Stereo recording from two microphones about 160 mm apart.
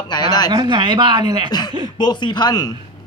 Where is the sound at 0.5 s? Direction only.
30° right (ahead or behind).